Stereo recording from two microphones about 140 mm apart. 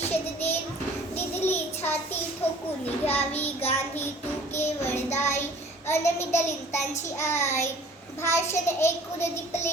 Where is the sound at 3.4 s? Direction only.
50° left (ahead or behind).